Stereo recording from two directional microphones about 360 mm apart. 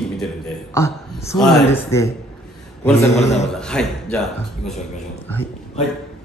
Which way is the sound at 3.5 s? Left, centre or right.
Centre.